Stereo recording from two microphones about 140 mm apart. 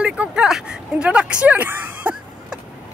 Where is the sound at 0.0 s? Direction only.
5° right (ahead or behind).